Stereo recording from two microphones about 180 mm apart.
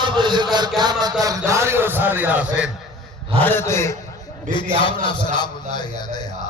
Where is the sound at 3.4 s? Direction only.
10° left (ahead or behind).